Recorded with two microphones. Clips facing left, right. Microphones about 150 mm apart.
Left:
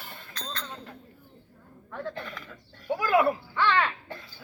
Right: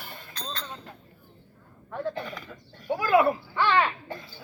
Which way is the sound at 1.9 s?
15° right (ahead or behind).